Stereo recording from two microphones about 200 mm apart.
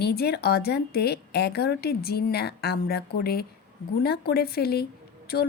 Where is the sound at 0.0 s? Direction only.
55° left (ahead or behind).